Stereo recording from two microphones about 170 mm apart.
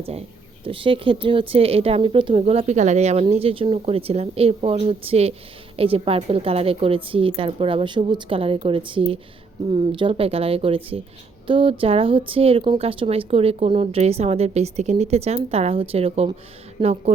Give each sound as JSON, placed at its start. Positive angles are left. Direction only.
{"t": 0.0, "sound": "speech", "side_deg": -35}
{"t": 16.8, "sound": "speech", "side_deg": -25}